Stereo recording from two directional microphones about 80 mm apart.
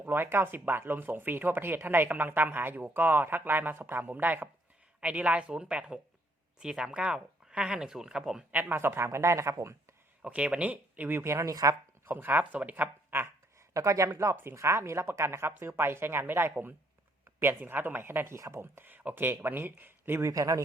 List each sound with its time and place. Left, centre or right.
0.0 s speech: right; by 8.4 s centre
8.5 s speech: right
10.2 s speech: centre; by 11.5 s right
11.5 s speech: right
12.0 s speech: right
13.7 s speech: right
20.2 s speech: right